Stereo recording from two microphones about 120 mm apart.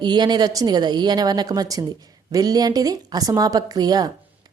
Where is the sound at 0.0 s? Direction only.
40° right (ahead or behind).